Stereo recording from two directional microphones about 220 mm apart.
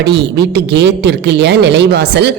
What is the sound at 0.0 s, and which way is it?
A woman's voice, 50° right (ahead or behind).